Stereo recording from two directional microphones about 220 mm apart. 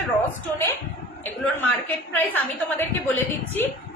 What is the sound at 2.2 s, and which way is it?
A woman's voice, 10° left (ahead or behind).